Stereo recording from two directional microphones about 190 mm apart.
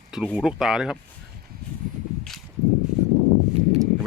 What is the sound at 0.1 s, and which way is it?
Speech, centre (ahead or behind).